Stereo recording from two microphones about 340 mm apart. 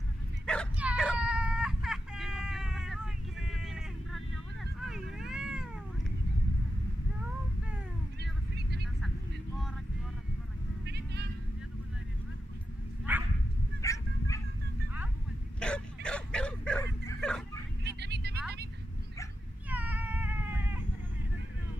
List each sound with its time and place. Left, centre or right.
0.5 s bow-wow: centre
4.8 s cat: centre
8.2 s a sound: right
13.1 s dog: centre
13.7 s dog: centre
15.6 s dog: centre
17.8 s vehicle: right
19.7 s cat: centre